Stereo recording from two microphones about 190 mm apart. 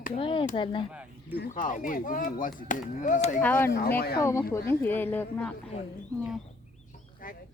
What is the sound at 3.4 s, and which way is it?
Speech, 10° left (ahead or behind).